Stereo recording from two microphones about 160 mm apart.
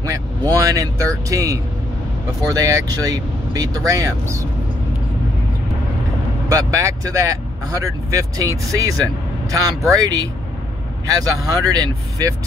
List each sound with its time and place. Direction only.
0.0 s speech: 20° right (ahead or behind)
6.5 s speech: 20° right (ahead or behind)
11.2 s speech: 20° right (ahead or behind)